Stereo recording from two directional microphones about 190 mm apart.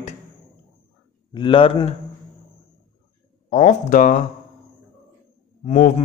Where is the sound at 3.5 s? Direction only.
40° left (ahead or behind).